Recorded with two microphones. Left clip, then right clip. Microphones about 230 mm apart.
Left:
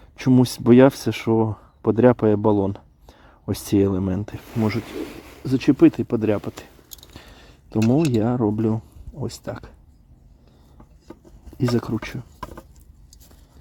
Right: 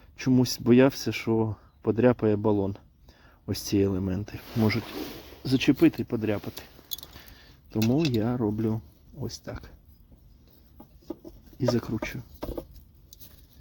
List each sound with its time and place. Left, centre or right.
0.2 s speech: centre
5.4 s speech: centre
5.8 s speech: centre
7.2 s a sound: centre
7.9 s speech: centre
11.5 s speech: centre